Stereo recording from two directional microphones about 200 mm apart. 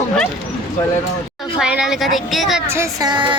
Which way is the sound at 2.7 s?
15° right (ahead or behind).